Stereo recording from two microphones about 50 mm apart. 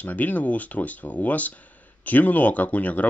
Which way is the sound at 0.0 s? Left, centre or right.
Left.